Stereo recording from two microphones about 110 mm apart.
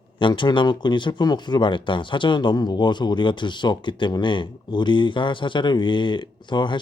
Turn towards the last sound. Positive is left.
turn(degrees=45)  # may be behind; listen again after turning